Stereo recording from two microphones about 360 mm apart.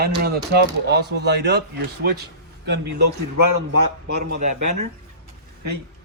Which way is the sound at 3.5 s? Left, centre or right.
Right.